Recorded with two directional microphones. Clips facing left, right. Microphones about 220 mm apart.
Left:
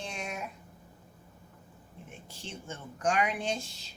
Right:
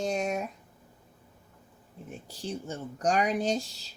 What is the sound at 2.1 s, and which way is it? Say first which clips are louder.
Speech: right 9 dB; 35° right (ahead or behind).